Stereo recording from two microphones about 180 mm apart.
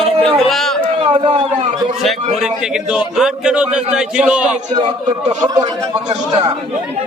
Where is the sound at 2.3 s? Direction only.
Centre (ahead or behind).